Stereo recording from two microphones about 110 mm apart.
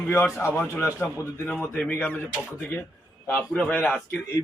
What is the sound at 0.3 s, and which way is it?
Speech, 25° left (ahead or behind).